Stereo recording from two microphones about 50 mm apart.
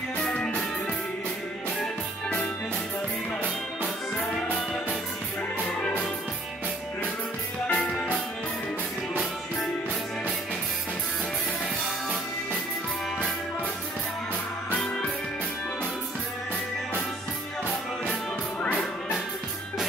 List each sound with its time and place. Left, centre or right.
0.3 s music: centre
7.6 s music: left